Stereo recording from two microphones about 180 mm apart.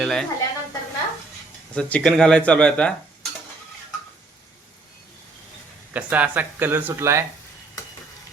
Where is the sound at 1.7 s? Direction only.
5° left (ahead or behind).